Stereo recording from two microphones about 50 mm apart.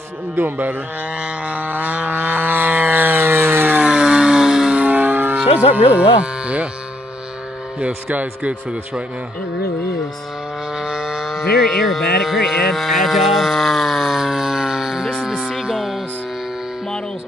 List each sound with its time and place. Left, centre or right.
0.4 s speech: right
1.1 s a sound: right
3.8 s a sound: centre
4.7 s a sound: right
5.9 s speech: right
7.8 s speech: right
10.8 s music: centre
11.6 s speech: centre
15.5 s music: centre